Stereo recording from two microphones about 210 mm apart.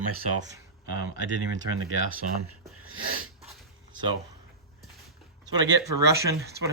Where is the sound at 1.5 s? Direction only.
75° right (ahead or behind).